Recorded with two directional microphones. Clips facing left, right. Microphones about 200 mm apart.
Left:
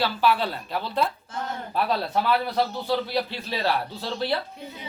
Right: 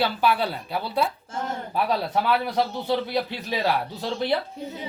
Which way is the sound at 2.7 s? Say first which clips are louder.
Right 1 dB; 20° right (ahead or behind).